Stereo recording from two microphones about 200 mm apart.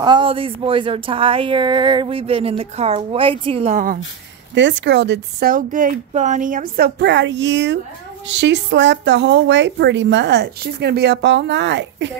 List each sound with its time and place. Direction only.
0.0 s speech: 25° right (ahead or behind); by 4.0 s 40° right (ahead or behind)
4.6 s a woman's voice: 65° right (ahead or behind)